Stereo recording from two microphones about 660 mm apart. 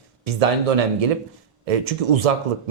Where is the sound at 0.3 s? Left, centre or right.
Right.